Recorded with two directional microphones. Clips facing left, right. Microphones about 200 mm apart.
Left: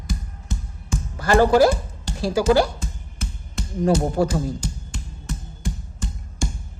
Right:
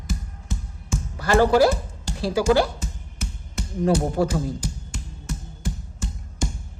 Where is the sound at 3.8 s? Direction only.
40° left (ahead or behind).